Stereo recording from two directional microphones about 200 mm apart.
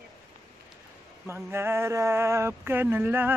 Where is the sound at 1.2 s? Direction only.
10° right (ahead or behind).